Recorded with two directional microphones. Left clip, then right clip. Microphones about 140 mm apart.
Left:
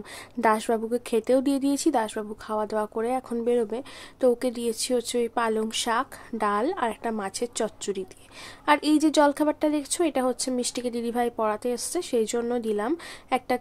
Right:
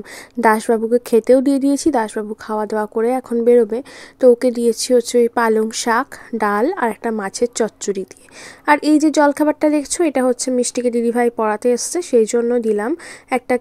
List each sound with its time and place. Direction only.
0.4 s a woman's voice: 35° right (ahead or behind)